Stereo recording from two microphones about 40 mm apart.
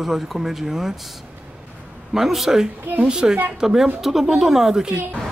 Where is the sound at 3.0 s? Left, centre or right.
Right.